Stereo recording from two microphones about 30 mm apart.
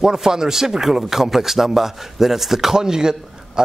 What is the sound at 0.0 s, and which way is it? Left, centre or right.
Speech, centre.